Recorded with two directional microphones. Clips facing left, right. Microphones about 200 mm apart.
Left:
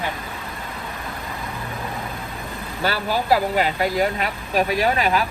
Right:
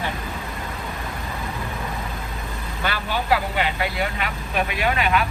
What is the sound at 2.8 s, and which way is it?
Speech, 40° left (ahead or behind).